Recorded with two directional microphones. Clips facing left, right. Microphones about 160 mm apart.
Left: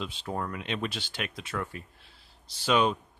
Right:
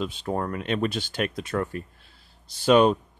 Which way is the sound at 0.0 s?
45° right (ahead or behind).